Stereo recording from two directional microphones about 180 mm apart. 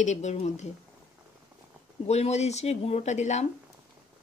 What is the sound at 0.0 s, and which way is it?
Speech, 40° left (ahead or behind).